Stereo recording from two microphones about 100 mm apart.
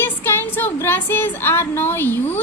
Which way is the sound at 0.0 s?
25° left (ahead or behind).